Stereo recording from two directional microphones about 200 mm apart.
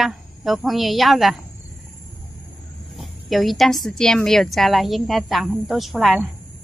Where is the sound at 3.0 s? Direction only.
Centre (ahead or behind).